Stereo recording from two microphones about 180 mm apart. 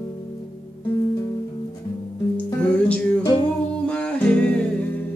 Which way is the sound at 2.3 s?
10° left (ahead or behind).